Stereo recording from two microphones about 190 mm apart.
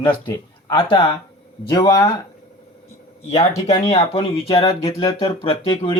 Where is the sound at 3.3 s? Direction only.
30° left (ahead or behind).